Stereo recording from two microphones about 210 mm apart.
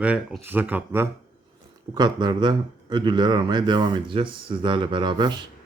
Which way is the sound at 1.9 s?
20° right (ahead or behind).